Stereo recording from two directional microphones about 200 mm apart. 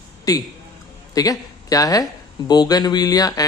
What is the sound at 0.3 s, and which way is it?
A man's voice, 20° left (ahead or behind).